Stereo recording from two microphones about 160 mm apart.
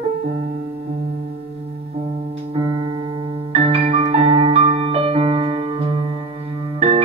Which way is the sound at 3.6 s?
35° right (ahead or behind).